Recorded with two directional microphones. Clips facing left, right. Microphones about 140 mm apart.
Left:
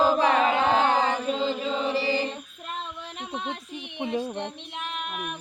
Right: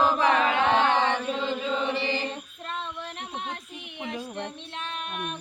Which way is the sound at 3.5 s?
25° left (ahead or behind).